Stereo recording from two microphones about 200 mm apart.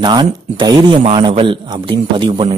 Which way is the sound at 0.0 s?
20° right (ahead or behind).